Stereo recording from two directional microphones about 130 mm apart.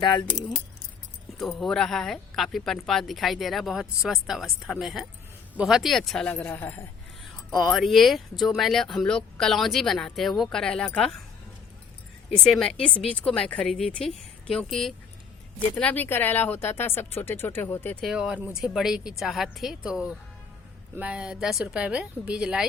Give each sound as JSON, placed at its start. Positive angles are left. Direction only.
{"t": 0.0, "sound": "speech", "side_deg": 35}
{"t": 1.4, "sound": "speech", "side_deg": 0}
{"t": 6.3, "sound": "speech", "side_deg": 15}
{"t": 7.5, "sound": "speech", "side_deg": 0}
{"t": 12.5, "sound": "speech", "side_deg": 5}
{"t": 15.7, "sound": "speech", "side_deg": 10}
{"t": 18.0, "sound": "speech", "side_deg": -5}